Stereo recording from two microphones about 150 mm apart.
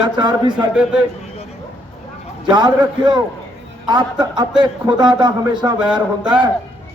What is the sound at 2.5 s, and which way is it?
A man's voice, 30° right (ahead or behind).